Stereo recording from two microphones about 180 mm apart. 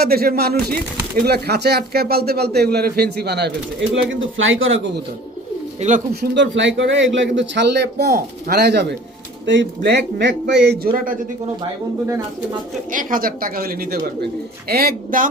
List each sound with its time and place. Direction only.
0.0 s speech: 55° right (ahead or behind); by 4.8 s 90° right
5.8 s speech: 40° right (ahead or behind)
6.1 s speech: 85° right
10.9 s a woman's voice: 50° right (ahead or behind)
12.9 s a woman's voice: 50° right (ahead or behind)